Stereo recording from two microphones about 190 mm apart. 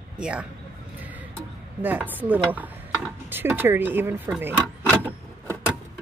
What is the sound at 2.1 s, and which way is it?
Speech, 10° right (ahead or behind).